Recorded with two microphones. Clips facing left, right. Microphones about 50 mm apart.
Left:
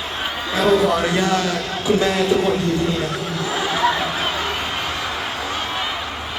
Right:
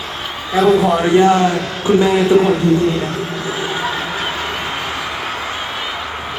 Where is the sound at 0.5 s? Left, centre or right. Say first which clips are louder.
Right 4 dB; centre.